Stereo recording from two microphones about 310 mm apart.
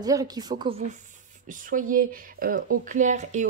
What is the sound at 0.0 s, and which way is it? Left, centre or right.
A woman's voice, centre.